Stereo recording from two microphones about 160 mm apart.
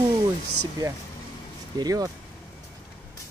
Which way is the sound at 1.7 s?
25° right (ahead or behind).